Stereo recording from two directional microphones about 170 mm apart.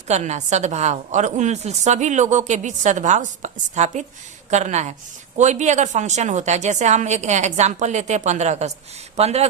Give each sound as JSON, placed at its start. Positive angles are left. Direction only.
{"t": 0.1, "sound": "a woman's voice", "side_deg": -45}